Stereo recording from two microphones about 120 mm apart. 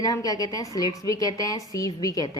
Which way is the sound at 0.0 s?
30° left (ahead or behind).